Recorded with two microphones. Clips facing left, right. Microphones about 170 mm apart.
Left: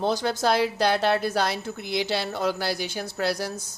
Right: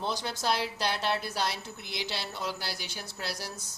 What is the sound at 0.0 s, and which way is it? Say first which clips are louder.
A woman's voice: left 9 dB; 45° left (ahead or behind).